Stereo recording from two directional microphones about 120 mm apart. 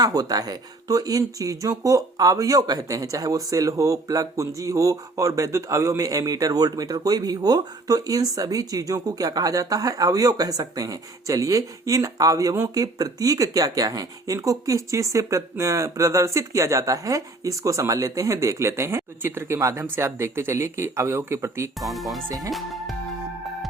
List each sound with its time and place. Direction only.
0.0 s speech: 30° right (ahead or behind)
21.8 s speech: centre (ahead or behind)